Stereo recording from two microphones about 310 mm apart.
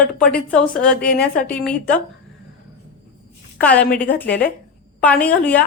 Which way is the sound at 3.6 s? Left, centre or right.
Centre.